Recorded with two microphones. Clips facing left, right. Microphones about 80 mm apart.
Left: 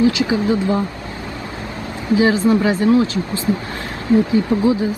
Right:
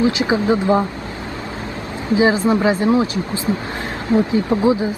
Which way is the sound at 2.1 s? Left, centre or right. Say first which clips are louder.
Left 1 dB; right.